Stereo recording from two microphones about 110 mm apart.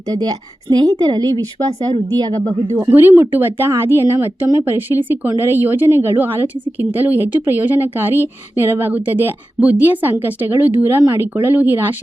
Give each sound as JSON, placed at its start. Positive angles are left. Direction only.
{"t": 0.1, "sound": "speech", "side_deg": -35}
{"t": 2.8, "sound": "a woman's voice", "side_deg": -20}